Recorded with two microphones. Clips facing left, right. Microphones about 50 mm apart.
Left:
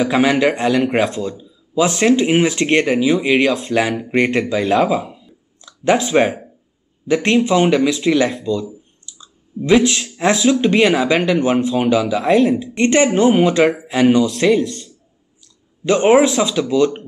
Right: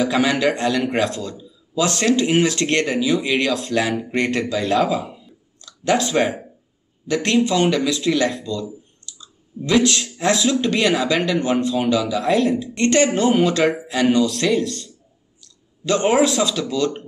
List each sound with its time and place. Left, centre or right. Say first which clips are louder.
0.0 s speech: left 3 dB; centre
4.6 s speech: left 3 dB; centre
5.6 s speech: left 3 dB; left
12.3 s speech: left 5 dB; centre
12.5 s speech: left 3 dB; left